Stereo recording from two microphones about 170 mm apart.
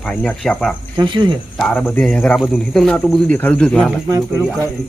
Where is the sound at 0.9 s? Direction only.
25° right (ahead or behind).